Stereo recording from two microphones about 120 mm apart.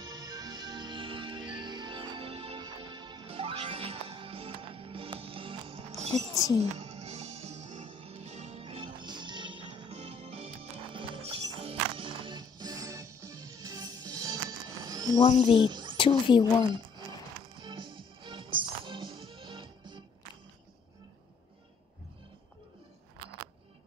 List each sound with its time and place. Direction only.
0.0 s music: 35° right (ahead or behind); by 5.9 s 50° right (ahead or behind)
5.9 s a sound: 65° right (ahead or behind)
6.3 s a woman's voice: 30° left (ahead or behind)
6.8 s music: 60° right (ahead or behind)
9.0 s music: 40° right (ahead or behind)
9.7 s music: 60° right (ahead or behind); by 14.4 s 30° right (ahead or behind)
14.9 s a sound: 30° right (ahead or behind)
15.1 s speech: 40° left (ahead or behind)
15.7 s a sound: 40° right (ahead or behind)
16.0 s a woman's voice: 45° left (ahead or behind)
17.6 s music: 45° right (ahead or behind)